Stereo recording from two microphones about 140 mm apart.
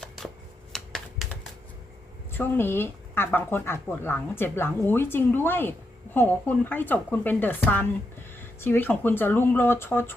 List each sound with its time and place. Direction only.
0.7 s computer keyboard: 5° left (ahead or behind)
2.3 s speech: 15° left (ahead or behind)